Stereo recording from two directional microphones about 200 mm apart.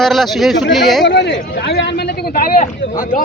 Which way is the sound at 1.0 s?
60° left (ahead or behind).